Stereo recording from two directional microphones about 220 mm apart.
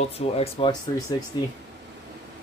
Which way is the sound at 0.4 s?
20° left (ahead or behind).